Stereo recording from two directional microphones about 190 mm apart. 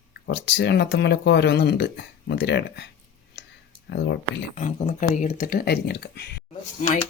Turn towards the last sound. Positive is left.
turn(degrees=40)  # may be behind; listen again after turning